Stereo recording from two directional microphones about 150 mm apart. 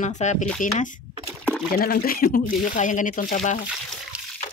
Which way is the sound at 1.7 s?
90° left.